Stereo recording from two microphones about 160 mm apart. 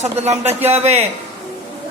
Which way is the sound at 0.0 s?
45° right (ahead or behind).